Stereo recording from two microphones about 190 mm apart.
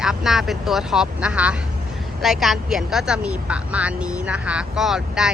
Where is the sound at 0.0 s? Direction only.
5° right (ahead or behind).